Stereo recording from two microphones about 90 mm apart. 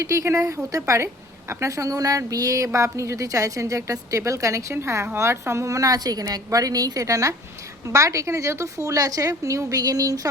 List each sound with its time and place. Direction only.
0.0 s a woman's voice: 35° right (ahead or behind)